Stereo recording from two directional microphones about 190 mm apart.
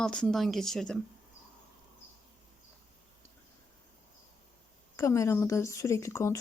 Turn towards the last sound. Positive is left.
turn(degrees=15)  # may be behind; listen again after turning